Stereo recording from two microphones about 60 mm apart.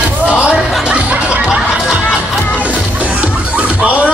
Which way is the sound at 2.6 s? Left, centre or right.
Right.